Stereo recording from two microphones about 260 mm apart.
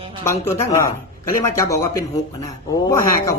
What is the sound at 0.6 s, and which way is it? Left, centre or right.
A woman's voice, centre.